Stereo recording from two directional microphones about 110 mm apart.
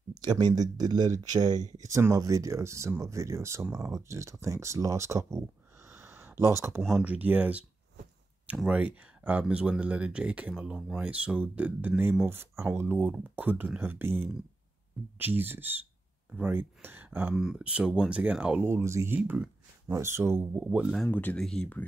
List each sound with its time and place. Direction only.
0.1 s speech: 40° right (ahead or behind)
5.9 s a sound: 20° right (ahead or behind)
6.8 s speech: centre (ahead or behind)
7.1 s speech: 15° right (ahead or behind)
8.6 s speech: 15° right (ahead or behind)
18.7 s speech: 25° right (ahead or behind)
21.1 s speech: 15° left (ahead or behind)